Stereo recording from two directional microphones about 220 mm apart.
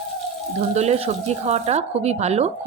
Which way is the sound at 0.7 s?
30° right (ahead or behind).